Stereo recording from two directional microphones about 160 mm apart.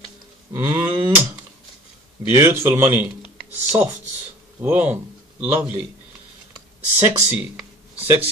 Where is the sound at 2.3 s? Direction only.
15° right (ahead or behind).